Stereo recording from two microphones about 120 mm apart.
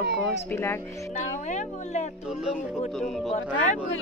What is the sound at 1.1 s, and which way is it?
Speech, 75° left (ahead or behind).